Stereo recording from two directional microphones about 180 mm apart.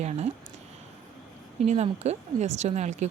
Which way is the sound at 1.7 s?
40° right (ahead or behind).